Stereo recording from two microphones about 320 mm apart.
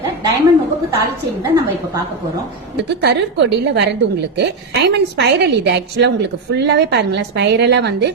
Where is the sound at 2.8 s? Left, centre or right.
Right.